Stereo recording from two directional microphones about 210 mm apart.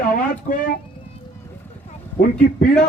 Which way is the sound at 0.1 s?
40° left (ahead or behind).